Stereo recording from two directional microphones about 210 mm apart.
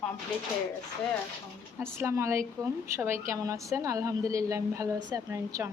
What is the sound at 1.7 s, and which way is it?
A woman's voice, 10° right (ahead or behind).